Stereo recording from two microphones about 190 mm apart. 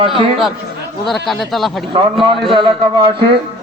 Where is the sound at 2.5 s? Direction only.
25° right (ahead or behind).